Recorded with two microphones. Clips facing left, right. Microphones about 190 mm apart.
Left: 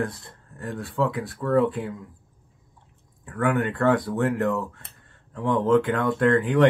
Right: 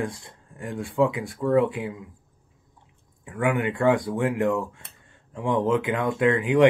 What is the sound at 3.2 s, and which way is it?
Speech, 15° right (ahead or behind).